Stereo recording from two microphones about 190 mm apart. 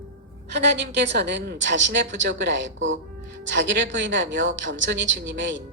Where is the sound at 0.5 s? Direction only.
65° right (ahead or behind).